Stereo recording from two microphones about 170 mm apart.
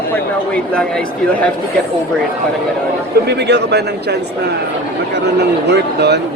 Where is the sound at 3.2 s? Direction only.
80° right.